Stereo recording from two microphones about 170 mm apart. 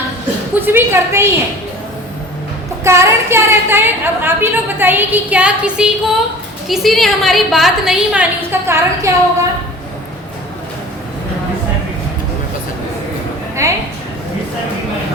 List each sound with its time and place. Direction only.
0.6 s a woman's voice: 10° right (ahead or behind)
2.8 s a woman's voice: 15° right (ahead or behind)
13.6 s a woman's voice: 15° right (ahead or behind)